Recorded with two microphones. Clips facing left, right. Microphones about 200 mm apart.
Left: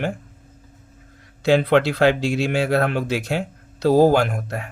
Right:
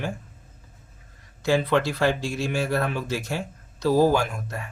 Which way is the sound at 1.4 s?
65° left (ahead or behind).